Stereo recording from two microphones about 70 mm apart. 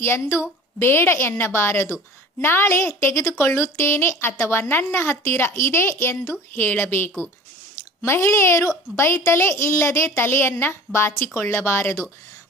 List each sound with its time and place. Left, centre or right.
0.0 s a woman's voice: left
6.5 s a woman's voice: left